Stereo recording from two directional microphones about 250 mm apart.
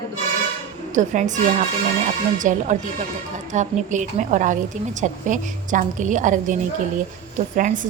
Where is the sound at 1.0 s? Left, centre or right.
Right.